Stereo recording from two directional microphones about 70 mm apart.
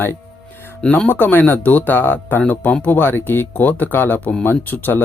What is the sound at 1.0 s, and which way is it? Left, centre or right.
Speech, left.